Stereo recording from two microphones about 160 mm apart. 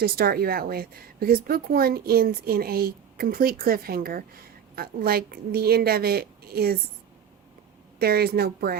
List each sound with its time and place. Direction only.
0.0 s a woman's voice: 75° right (ahead or behind)
7.9 s a woman's voice: 75° right (ahead or behind)